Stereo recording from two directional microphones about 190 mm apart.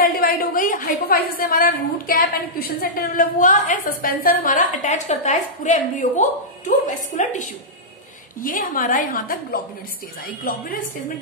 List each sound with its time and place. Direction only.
0.0 s a woman's voice: 50° left (ahead or behind)